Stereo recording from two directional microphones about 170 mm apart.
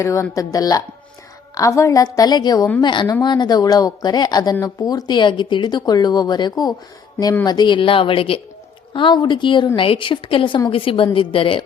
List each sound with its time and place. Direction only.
0.0 s speech: 20° left (ahead or behind)